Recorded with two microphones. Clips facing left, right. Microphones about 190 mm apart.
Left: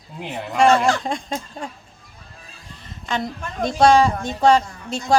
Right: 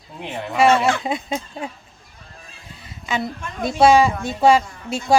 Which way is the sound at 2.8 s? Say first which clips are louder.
Right 1 dB; 5° right (ahead or behind).